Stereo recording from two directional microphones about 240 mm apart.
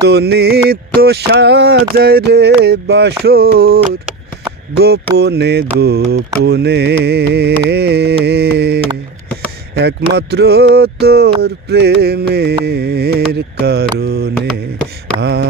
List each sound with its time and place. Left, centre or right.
0.0 s mantra: right
1.0 s a sound: right
4.7 s mantra: right